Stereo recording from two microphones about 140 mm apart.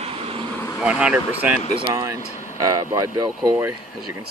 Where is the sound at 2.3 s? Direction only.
60° left (ahead or behind).